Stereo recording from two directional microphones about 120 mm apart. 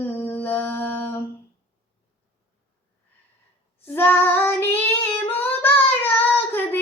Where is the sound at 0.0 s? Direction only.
15° left (ahead or behind).